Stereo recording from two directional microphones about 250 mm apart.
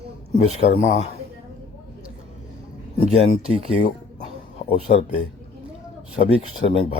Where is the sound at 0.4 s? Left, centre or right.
Left.